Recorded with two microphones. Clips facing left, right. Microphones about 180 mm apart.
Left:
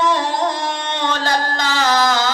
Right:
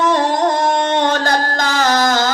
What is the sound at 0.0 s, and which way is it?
Music, 50° right (ahead or behind).